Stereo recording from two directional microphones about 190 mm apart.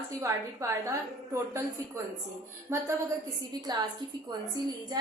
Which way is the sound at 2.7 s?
15° right (ahead or behind).